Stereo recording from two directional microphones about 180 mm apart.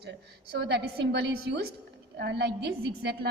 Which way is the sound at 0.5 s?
65° right (ahead or behind).